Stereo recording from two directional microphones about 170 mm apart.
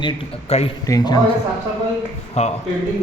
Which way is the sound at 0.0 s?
35° left (ahead or behind).